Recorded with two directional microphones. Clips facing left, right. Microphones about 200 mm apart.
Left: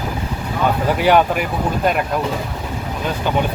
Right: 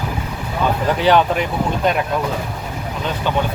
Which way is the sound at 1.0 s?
10° left (ahead or behind).